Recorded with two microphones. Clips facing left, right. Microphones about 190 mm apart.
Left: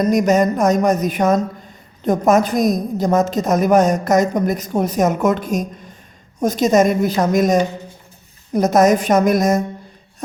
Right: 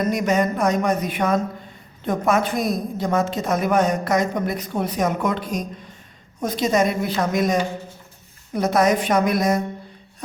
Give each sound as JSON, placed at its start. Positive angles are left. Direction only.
{"t": 0.0, "sound": "a woman's voice", "side_deg": 40}